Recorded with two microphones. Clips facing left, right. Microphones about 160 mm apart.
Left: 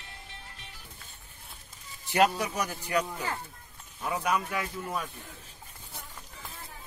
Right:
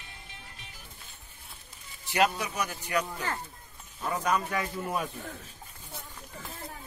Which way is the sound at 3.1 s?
10° left (ahead or behind).